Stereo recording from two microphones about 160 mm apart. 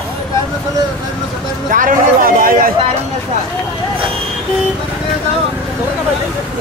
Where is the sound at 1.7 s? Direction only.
55° right (ahead or behind).